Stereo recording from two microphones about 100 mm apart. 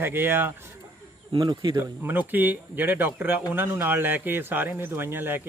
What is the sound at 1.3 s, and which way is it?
Speech, 45° right (ahead or behind).